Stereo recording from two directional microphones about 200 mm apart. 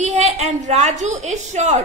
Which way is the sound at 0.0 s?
35° right (ahead or behind).